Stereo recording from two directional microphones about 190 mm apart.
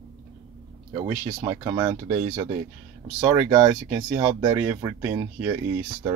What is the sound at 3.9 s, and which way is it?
Speech, 10° right (ahead or behind).